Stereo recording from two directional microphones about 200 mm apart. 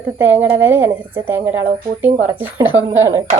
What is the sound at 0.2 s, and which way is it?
A woman's voice, 10° right (ahead or behind).